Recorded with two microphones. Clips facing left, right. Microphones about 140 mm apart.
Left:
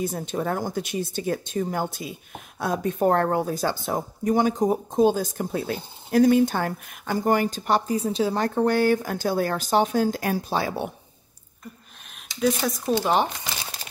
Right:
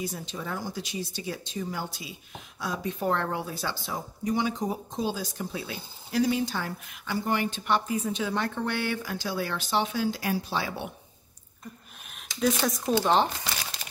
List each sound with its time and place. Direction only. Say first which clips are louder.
0.0 s speech: left 8 dB; 50° left (ahead or behind)
12.4 s speech: left 3 dB; centre (ahead or behind)